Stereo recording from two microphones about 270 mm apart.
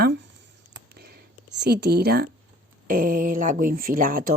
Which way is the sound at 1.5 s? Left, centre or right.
Right.